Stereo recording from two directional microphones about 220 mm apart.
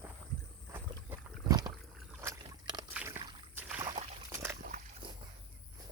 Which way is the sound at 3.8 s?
25° right (ahead or behind).